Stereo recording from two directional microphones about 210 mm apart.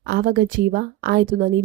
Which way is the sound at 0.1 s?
45° right (ahead or behind).